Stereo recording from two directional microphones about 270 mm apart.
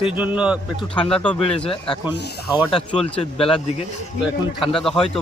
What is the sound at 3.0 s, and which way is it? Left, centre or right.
Speech, left.